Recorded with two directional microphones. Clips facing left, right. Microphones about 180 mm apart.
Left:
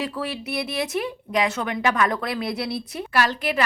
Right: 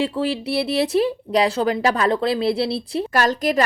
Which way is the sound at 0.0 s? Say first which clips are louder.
Right 7 dB; 25° right (ahead or behind).